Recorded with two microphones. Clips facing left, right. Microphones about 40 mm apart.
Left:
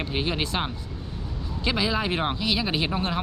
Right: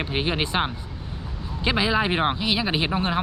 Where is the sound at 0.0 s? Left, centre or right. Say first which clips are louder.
Right 2 dB; centre.